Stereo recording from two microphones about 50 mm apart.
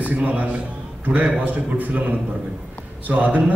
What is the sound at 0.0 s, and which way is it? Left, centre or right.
A man's voice, right.